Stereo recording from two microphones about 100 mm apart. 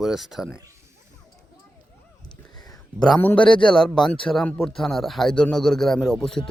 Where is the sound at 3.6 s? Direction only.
5° left (ahead or behind).